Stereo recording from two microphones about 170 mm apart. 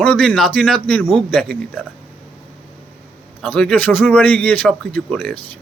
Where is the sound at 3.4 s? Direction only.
5° left (ahead or behind).